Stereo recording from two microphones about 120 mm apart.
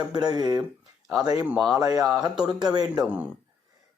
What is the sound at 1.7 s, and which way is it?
Speech, 30° right (ahead or behind).